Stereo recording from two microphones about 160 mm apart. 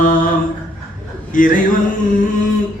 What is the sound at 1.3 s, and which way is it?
Speech, 60° left (ahead or behind).